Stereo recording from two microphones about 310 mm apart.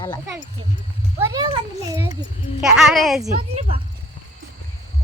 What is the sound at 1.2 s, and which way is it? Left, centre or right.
Speech, centre.